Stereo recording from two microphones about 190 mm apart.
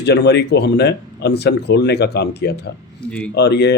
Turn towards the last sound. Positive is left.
turn(degrees=60)  # may be behind; listen again after turning